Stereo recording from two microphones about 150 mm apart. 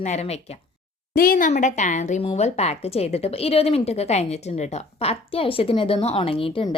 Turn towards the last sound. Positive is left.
turn(degrees=35)  # may be behind; listen again after turning